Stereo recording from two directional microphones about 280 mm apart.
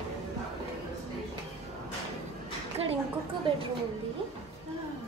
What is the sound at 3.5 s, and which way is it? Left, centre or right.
Speech, centre.